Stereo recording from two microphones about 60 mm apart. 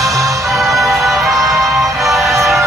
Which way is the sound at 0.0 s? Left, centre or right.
Right.